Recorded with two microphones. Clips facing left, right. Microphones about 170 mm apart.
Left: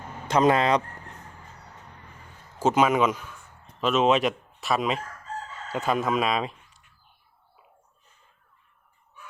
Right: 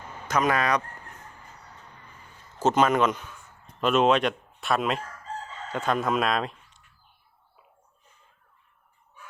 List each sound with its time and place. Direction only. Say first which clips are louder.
0.3 s speech: left 4 dB; 25° left (ahead or behind)
2.6 s speech: even; 10° left (ahead or behind)